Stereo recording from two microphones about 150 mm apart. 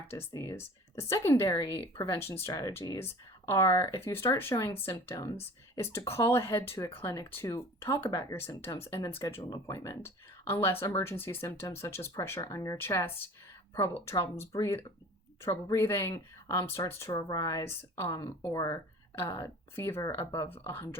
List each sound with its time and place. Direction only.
0.1 s speech: 20° left (ahead or behind); by 1.9 s 35° left (ahead or behind)
2.1 s speech: 15° left (ahead or behind)